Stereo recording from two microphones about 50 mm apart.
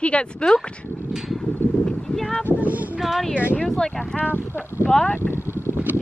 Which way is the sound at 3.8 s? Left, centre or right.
Centre.